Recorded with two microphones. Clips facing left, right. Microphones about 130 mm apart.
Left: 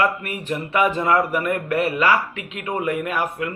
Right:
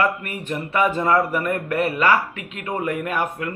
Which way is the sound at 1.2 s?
15° left (ahead or behind).